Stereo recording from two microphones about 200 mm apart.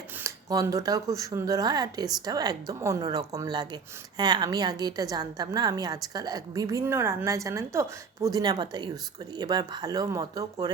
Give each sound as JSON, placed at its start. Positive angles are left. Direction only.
{"t": 0.2, "sound": "a woman's voice", "side_deg": -15}